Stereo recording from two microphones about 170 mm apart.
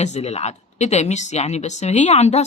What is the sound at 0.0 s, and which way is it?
A woman's voice, 40° left (ahead or behind).